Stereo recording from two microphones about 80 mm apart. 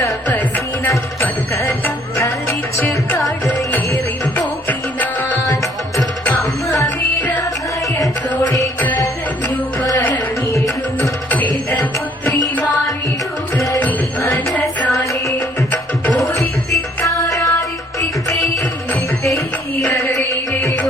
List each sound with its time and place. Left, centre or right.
0.3 s music: left
12.2 s music: left
13.7 s music: left
14.8 s music: left
17.0 s music: left
19.9 s music: left